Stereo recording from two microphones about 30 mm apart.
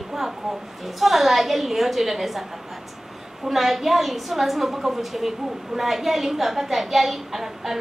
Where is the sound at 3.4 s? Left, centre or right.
Centre.